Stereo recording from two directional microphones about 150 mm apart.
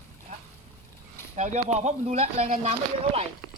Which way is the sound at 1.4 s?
50° right (ahead or behind).